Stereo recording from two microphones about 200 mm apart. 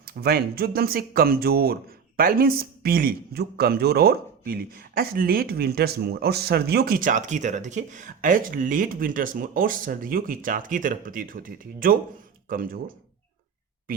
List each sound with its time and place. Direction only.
0.0 s speech: 50° right (ahead or behind)